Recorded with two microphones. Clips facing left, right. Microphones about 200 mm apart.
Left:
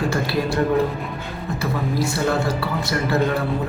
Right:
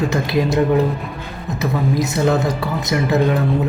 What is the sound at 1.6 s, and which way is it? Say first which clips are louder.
Speech: right 4 dB; 20° right (ahead or behind).